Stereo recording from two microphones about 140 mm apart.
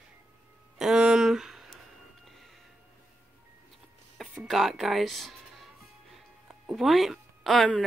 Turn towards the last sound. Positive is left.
turn(degrees=5)  # may be behind; listen again after turning